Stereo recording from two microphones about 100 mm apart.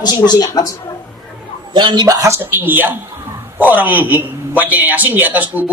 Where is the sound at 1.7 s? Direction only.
50° right (ahead or behind).